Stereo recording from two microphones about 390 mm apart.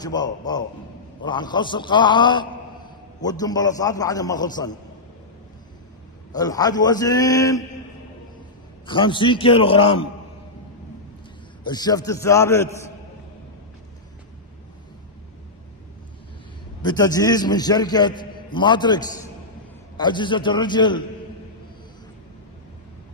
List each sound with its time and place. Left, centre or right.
0.0 s a man's voice: centre
6.3 s a man's voice: centre
8.8 s a man's voice: centre
11.6 s a man's voice: centre
16.8 s a man's voice: centre